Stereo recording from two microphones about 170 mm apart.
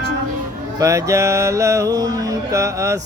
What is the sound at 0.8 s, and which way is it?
Music, 20° right (ahead or behind).